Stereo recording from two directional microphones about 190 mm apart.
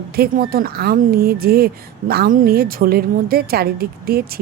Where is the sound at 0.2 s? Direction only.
50° right (ahead or behind).